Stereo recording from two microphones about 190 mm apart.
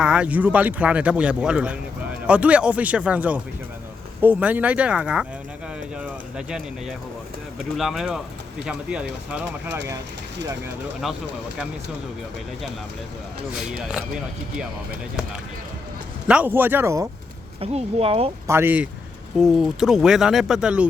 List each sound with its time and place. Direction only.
0.0 s speech: 5° right (ahead or behind)
11.0 s speech: centre (ahead or behind)
13.6 s speech: 5° right (ahead or behind)
16.2 s speech: 5° right (ahead or behind)
17.6 s speech: 30° right (ahead or behind)
18.4 s speech: 10° right (ahead or behind)